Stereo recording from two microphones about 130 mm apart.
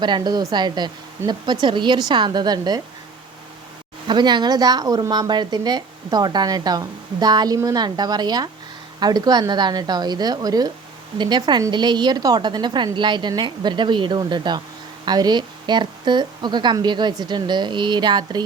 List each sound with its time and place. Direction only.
0.0 s a woman's voice: 35° right (ahead or behind)
4.0 s a woman's voice: 35° right (ahead or behind)